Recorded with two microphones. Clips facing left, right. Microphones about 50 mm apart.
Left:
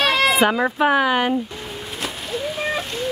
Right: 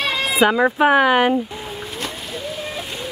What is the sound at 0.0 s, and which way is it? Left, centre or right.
Cat, left.